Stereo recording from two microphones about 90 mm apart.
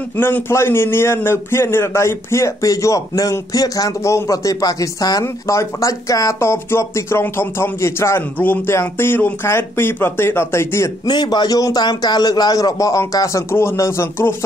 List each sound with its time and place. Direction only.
0.2 s a man's voice: 25° left (ahead or behind); by 5.2 s 45° left (ahead or behind)
5.2 s a man's voice: 35° left (ahead or behind)
11.1 s a man's voice: 55° left (ahead or behind); by 14.3 s 30° left (ahead or behind)